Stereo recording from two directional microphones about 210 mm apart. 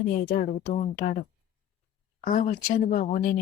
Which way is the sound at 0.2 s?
40° left (ahead or behind).